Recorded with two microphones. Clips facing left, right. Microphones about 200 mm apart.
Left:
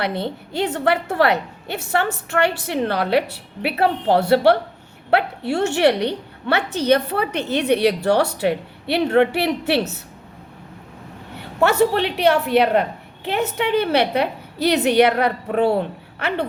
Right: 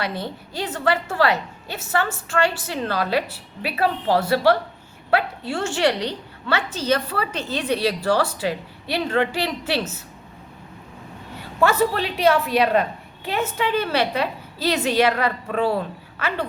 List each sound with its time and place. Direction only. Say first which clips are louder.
0.2 s speech: left 6 dB; 60° left (ahead or behind)
11.3 s speech: left 3 dB; 70° left (ahead or behind)
15.6 s a woman's voice: left 4 dB; 25° left (ahead or behind)